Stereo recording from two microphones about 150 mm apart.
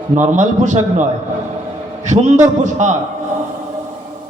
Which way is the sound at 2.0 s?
50° right (ahead or behind).